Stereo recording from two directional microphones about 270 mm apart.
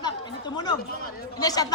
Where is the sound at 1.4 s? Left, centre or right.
Centre.